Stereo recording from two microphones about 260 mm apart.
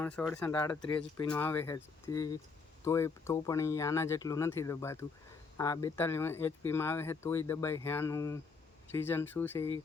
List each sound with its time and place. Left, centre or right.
0.0 s speech: centre